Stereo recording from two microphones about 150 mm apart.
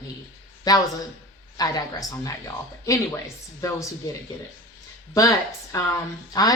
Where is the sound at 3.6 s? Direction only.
20° left (ahead or behind).